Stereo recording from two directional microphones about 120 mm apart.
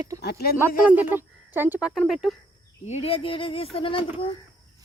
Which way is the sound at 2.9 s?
55° left (ahead or behind).